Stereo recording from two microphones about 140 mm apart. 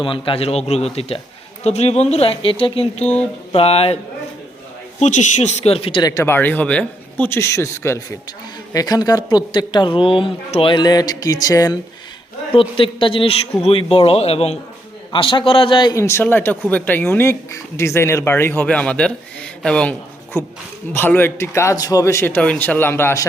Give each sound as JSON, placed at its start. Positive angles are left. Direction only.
{"t": 0.0, "sound": "speech", "side_deg": 40}
{"t": 4.9, "sound": "speech", "side_deg": 55}
{"t": 6.0, "sound": "speech", "side_deg": 25}
{"t": 12.5, "sound": "speech", "side_deg": 40}
{"t": 16.0, "sound": "speech", "side_deg": 20}